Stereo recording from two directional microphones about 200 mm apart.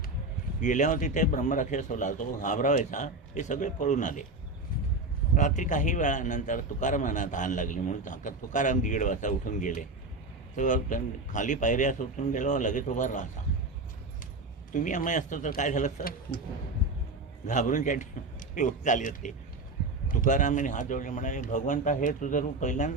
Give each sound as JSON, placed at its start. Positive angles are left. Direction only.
{"t": 0.6, "sound": "a man's voice", "side_deg": 40}
{"t": 5.3, "sound": "a man's voice", "side_deg": 40}
{"t": 14.7, "sound": "a man's voice", "side_deg": 40}
{"t": 17.4, "sound": "a man's voice", "side_deg": 40}